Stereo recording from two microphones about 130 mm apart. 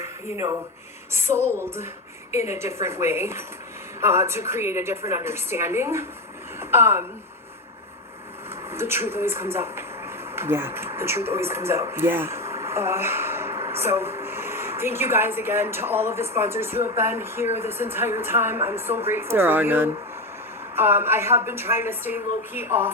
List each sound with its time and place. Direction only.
1.1 s speech: 20° right (ahead or behind)
2.3 s a woman's voice: 55° left (ahead or behind)
2.6 s speech: 20° right (ahead or behind)
8.7 s a woman's voice: 20° right (ahead or behind)